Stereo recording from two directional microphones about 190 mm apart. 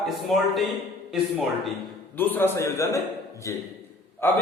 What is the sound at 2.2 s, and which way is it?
A man's voice, 10° left (ahead or behind).